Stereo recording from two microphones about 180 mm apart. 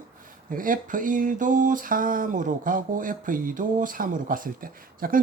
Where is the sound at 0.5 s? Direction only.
50° right (ahead or behind).